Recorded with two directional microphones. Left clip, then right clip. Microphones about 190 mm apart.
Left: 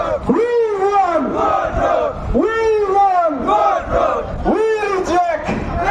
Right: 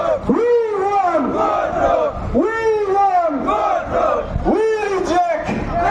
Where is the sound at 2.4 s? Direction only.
45° left (ahead or behind).